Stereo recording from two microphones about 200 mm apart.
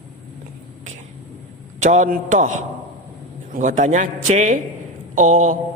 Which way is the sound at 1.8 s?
35° right (ahead or behind).